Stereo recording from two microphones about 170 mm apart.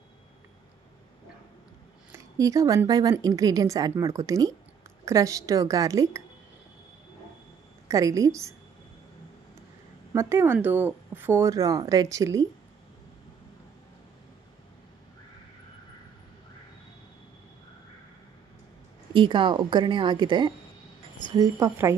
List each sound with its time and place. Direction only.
2.1 s speech: 20° right (ahead or behind)
7.9 s speech: 20° right (ahead or behind)
10.1 s speech: 15° right (ahead or behind)
19.1 s speech: 30° right (ahead or behind)